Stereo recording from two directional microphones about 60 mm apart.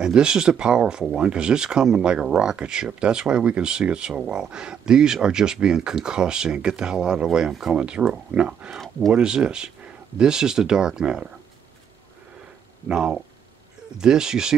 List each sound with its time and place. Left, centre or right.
0.0 s speech: centre
12.8 s speech: centre